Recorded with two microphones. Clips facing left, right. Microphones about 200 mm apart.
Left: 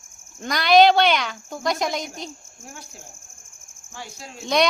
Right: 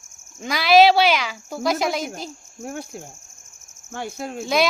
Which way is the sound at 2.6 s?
60° right (ahead or behind).